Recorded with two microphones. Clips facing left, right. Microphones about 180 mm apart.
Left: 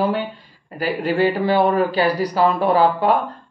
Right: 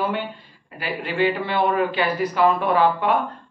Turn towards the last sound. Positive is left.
turn(degrees=35)  # may be behind; listen again after turning